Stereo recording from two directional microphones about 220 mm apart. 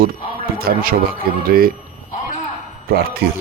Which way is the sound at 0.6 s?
40° right (ahead or behind).